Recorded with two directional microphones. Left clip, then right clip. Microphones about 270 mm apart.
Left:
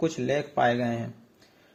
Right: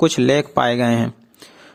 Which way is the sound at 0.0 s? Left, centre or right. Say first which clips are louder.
Right 11 dB; right.